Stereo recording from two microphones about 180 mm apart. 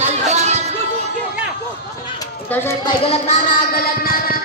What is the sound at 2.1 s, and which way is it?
Children playing, 15° left (ahead or behind).